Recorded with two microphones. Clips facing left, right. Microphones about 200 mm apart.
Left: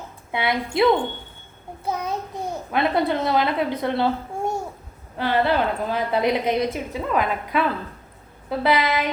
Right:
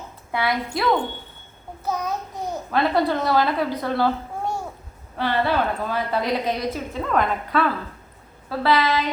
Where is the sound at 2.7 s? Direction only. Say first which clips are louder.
Right 1 dB; 20° left (ahead or behind).